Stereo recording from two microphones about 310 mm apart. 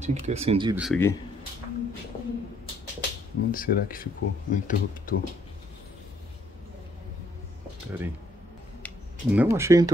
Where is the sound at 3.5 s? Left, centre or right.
Left.